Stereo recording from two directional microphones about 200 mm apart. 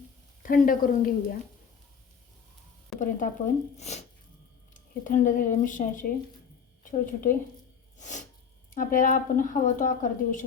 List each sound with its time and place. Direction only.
0.4 s a woman's voice: 45° left (ahead or behind)
3.0 s speech: 40° left (ahead or behind)
7.9 s sneeze: 35° left (ahead or behind)
8.7 s speech: 40° left (ahead or behind)